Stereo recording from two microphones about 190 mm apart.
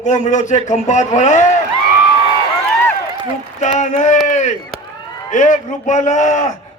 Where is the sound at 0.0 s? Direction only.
40° left (ahead or behind).